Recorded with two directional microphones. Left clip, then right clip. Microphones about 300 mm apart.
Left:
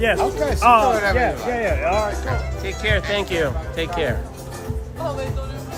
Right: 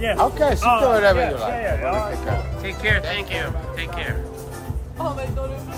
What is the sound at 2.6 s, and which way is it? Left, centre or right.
Speech, centre.